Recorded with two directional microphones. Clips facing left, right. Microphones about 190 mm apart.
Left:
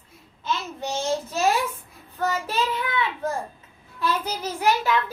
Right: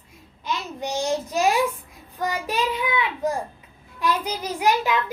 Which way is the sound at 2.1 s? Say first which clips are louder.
Even; 15° right (ahead or behind).